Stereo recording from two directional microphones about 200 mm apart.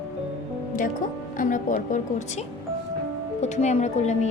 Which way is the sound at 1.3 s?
40° left (ahead or behind).